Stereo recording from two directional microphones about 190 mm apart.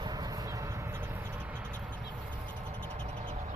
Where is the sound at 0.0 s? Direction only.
20° right (ahead or behind).